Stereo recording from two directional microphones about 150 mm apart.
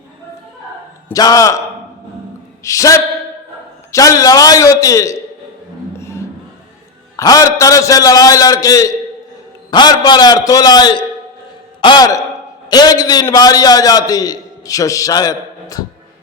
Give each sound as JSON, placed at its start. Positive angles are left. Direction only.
{"t": 1.1, "sound": "a man's voice", "side_deg": 25}
{"t": 2.6, "sound": "a man's voice", "side_deg": 20}
{"t": 6.0, "sound": "music", "side_deg": 20}
{"t": 7.2, "sound": "a man's voice", "side_deg": 20}